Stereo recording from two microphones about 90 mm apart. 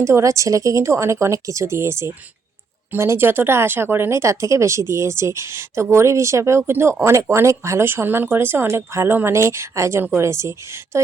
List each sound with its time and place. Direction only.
0.0 s speech: 35° right (ahead or behind)